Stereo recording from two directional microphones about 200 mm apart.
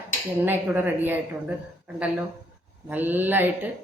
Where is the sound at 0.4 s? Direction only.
10° right (ahead or behind).